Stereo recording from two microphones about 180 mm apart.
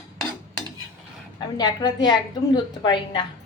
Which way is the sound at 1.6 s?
20° left (ahead or behind).